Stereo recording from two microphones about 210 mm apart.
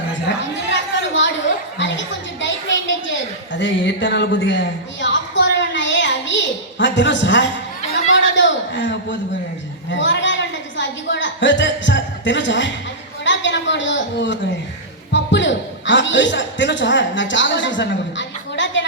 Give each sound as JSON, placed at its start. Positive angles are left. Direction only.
{"t": 0.7, "sound": "chatter", "side_deg": 60}
{"t": 1.8, "sound": "a sound", "side_deg": 60}
{"t": 9.9, "sound": "a woman's voice", "side_deg": 60}